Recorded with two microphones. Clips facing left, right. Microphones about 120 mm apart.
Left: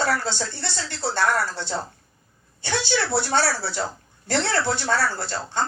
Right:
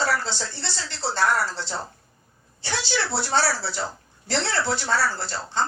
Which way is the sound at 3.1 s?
50° left (ahead or behind).